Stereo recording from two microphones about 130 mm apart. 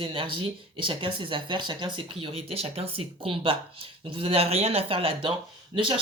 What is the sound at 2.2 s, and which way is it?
Speech, 50° right (ahead or behind).